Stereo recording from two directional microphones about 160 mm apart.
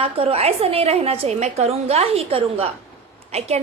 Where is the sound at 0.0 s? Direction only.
35° right (ahead or behind).